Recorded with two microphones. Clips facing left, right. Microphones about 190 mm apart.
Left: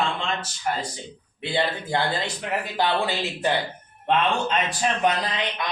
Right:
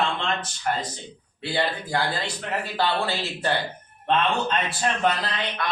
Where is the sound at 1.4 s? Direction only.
20° left (ahead or behind).